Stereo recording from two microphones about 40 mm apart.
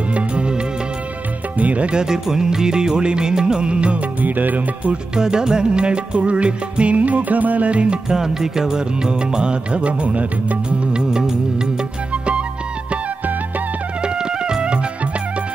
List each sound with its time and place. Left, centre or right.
0.1 s music: right
1.6 s speech: right
1.9 s music: centre
4.2 s music: right
4.8 s music: right
8.1 s music: centre; by 10.8 s right
10.9 s music: right
12.1 s flute: right
14.0 s music: right